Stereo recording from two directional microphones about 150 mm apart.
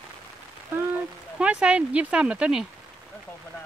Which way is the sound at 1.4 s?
10° right (ahead or behind).